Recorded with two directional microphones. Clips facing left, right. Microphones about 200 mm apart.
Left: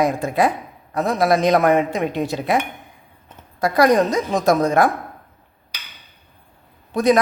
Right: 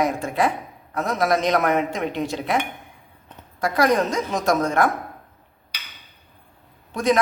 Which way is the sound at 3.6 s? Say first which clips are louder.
Left 4 dB; 35° left (ahead or behind).